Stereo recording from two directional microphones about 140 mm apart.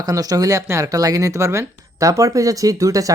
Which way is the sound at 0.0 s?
25° right (ahead or behind).